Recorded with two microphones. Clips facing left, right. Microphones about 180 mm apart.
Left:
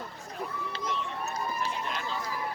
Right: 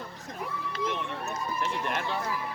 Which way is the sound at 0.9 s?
60° right (ahead or behind).